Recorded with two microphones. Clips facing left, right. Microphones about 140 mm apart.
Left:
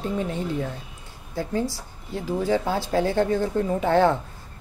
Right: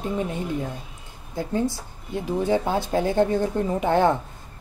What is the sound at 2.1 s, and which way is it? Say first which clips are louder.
Speech: right 1 dB; 20° right (ahead or behind).